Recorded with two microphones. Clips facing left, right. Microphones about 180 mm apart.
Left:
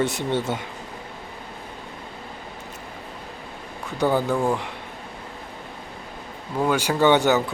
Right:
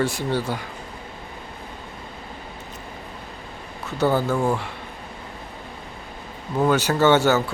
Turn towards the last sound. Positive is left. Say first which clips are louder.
# right 1 dB
turn(degrees=15)  # may be behind; listen again after turning